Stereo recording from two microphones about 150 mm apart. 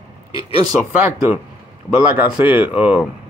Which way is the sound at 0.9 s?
15° right (ahead or behind).